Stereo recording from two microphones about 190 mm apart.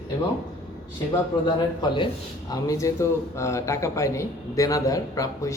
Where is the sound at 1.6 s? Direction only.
25° left (ahead or behind).